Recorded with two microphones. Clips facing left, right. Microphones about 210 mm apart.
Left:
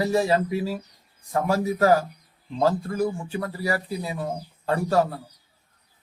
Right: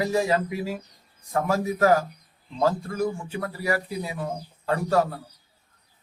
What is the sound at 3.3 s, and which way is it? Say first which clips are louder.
Speech: even; 35° left (ahead or behind).